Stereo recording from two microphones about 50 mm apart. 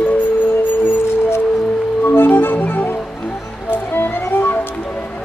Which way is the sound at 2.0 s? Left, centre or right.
Left.